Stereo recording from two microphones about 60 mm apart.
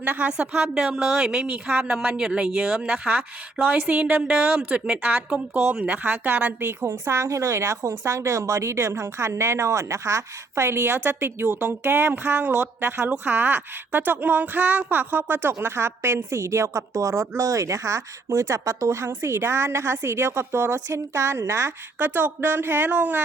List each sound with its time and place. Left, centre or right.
0.0 s a woman's voice: right
6.7 s a woman's voice: right
21.9 s a woman's voice: right